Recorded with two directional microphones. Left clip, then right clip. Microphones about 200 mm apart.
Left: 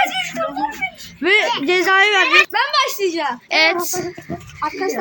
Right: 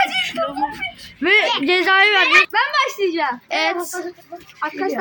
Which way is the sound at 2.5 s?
35° left (ahead or behind).